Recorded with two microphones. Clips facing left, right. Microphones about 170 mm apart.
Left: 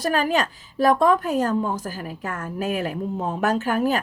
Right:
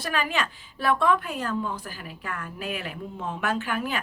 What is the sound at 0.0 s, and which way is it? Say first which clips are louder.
A woman's voice: left 7 dB; 40° left (ahead or behind).